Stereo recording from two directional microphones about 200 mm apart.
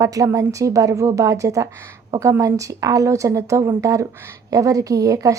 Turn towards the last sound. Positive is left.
turn(degrees=-15)  # may be behind; listen again after turning